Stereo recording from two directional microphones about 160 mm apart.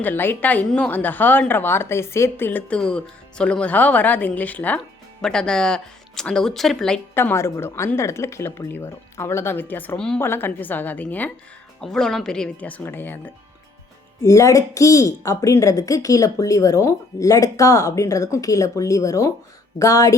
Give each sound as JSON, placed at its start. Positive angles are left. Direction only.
{"t": 0.0, "sound": "speech", "side_deg": 15}